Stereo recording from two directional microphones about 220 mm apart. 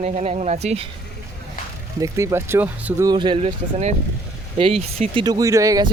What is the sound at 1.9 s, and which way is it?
Speech, 15° right (ahead or behind).